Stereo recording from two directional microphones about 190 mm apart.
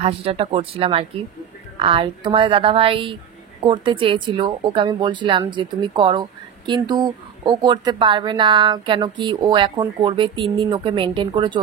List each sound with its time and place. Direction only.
0.0 s speech: 30° right (ahead or behind)